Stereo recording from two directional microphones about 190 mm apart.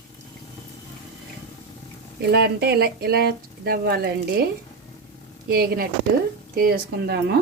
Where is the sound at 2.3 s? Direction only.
60° right (ahead or behind).